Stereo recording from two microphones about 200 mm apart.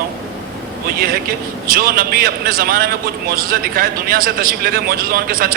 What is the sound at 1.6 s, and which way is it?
A man's voice, 45° right (ahead or behind).